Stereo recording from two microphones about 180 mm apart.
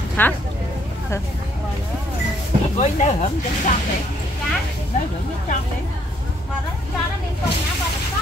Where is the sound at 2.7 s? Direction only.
40° left (ahead or behind).